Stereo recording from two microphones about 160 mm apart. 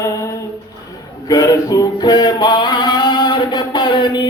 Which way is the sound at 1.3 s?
25° left (ahead or behind).